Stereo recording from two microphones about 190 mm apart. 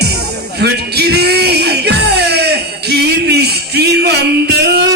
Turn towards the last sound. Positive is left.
turn(degrees=-60)  # may be behind; listen again after turning